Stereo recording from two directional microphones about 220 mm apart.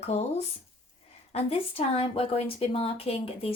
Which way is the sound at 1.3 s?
25° left (ahead or behind).